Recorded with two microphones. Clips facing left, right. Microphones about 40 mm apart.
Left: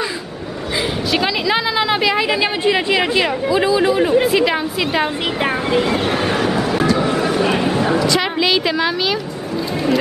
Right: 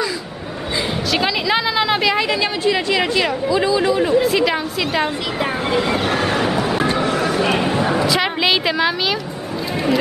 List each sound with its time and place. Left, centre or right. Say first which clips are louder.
1.1 s a woman's voice: left 1 dB; centre
2.6 s speech: left 1 dB; centre
7.0 s a sound: left 1 dB; centre
8.1 s a woman's voice: left 1 dB; centre